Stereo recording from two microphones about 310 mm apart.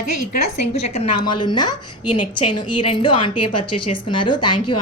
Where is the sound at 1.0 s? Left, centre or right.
Left.